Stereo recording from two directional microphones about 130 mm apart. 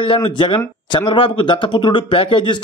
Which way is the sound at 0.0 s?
40° left (ahead or behind).